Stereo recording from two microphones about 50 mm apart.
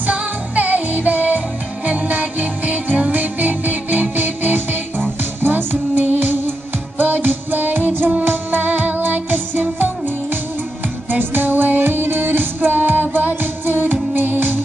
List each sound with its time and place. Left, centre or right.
0.0 s music: right